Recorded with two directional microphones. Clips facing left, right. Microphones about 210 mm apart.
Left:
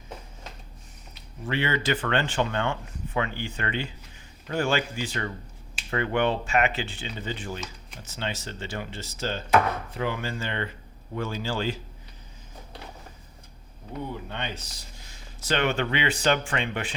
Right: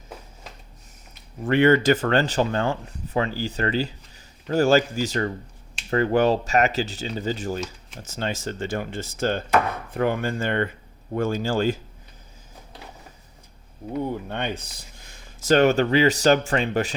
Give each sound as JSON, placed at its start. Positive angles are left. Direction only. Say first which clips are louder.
{"t": 1.1, "sound": "speech", "louder": "right 8 dB", "side_deg": -50}
{"t": 14.1, "sound": "speech", "louder": "right 6 dB", "side_deg": -50}